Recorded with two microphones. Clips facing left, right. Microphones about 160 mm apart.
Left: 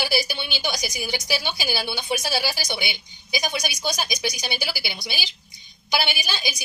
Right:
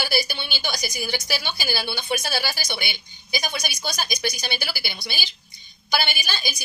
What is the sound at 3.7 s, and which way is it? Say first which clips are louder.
Speech: left 2 dB; 15° left (ahead or behind).